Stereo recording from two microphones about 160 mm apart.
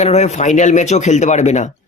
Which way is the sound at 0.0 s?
45° left (ahead or behind).